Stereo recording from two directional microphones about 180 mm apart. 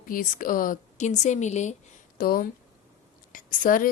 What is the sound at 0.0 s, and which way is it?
A woman's voice, 50° left (ahead or behind).